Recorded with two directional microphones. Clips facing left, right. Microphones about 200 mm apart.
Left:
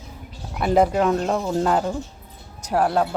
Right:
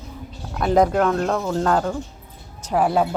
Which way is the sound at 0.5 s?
5° left (ahead or behind).